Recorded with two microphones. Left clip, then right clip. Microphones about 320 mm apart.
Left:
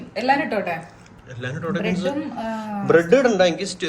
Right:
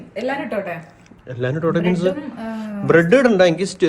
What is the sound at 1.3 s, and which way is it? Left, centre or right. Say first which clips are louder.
A man's voice: right 7 dB; centre.